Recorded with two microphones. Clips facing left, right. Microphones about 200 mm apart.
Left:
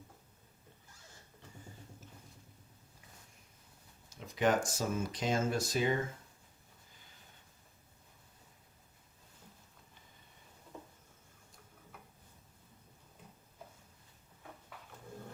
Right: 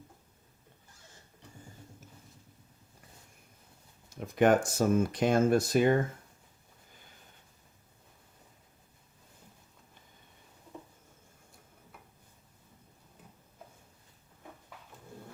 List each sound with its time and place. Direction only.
4.2 s speech: 60° right (ahead or behind)